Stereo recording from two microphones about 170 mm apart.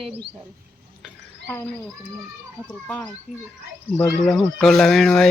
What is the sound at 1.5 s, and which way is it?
Speech, 10° left (ahead or behind).